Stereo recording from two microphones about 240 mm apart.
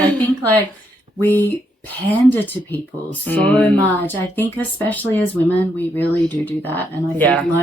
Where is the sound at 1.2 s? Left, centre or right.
Centre.